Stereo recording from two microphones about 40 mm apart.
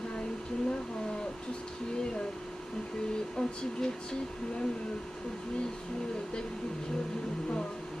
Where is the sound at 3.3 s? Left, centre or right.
Centre.